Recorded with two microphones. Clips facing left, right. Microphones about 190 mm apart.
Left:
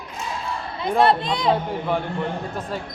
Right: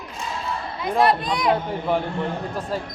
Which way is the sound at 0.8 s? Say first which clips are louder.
Left 1 dB; 25° left (ahead or behind).